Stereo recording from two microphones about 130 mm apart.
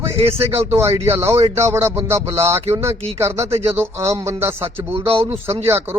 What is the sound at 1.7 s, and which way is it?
Speech, 20° right (ahead or behind).